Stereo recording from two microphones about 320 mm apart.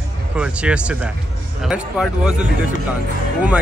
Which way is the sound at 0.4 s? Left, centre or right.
Centre.